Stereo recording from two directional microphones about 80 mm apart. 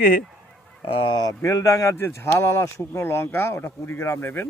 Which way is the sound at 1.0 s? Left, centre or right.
Left.